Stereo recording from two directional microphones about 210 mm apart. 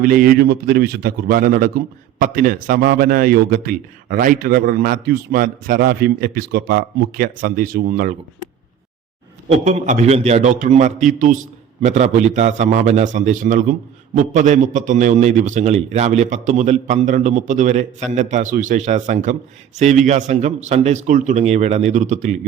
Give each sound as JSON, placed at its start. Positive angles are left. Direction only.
{"t": 0.0, "sound": "a man's voice", "side_deg": -45}
{"t": 9.5, "sound": "a man's voice", "side_deg": -30}